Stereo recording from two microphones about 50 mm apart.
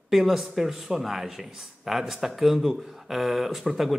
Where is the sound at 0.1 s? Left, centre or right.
Centre.